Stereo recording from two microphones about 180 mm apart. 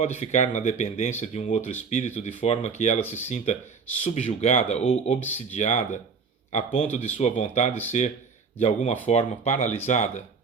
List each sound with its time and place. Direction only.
0.0 s speech: 40° left (ahead or behind)